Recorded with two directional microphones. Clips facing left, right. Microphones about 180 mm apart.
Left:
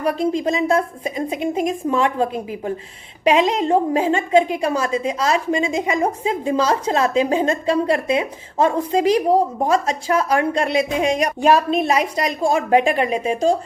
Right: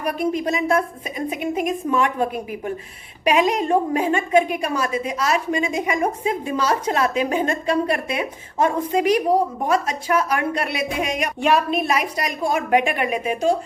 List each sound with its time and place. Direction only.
0.2 s a woman's voice: 25° left (ahead or behind)